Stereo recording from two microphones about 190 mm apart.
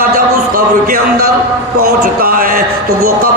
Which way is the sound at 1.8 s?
50° right (ahead or behind).